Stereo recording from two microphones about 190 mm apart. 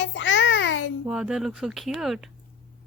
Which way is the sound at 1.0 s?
5° right (ahead or behind).